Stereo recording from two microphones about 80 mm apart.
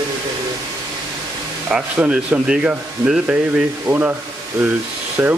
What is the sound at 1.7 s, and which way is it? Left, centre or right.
Speech, centre.